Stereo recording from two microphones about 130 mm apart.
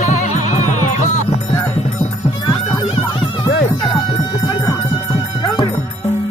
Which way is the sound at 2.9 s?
40° left (ahead or behind).